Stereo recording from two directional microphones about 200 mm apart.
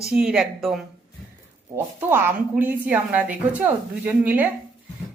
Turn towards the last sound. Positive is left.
turn(degrees=-10)  # may be behind; listen again after turning